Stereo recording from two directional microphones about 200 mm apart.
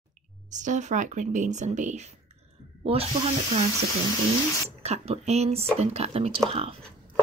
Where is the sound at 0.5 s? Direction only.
40° right (ahead or behind).